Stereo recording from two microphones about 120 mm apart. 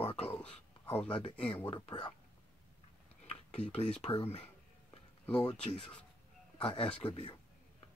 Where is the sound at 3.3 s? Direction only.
60° left (ahead or behind).